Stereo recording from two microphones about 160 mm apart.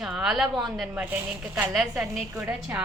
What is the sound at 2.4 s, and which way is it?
Speech, 10° right (ahead or behind).